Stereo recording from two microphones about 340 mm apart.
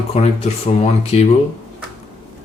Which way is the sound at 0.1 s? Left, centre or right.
Centre.